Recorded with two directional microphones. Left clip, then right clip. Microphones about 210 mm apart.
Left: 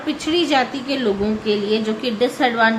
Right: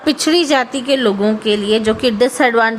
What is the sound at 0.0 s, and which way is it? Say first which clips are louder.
A woman's voice: right 6 dB; 50° right (ahead or behind).